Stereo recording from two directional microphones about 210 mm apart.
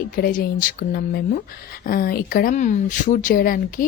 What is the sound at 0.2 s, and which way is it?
Speech, 40° left (ahead or behind).